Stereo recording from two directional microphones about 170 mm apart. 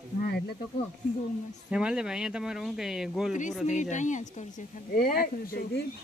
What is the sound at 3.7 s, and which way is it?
Speech, 45° left (ahead or behind).